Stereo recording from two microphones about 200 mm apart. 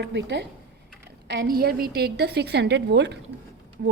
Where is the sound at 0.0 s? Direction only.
60° right (ahead or behind).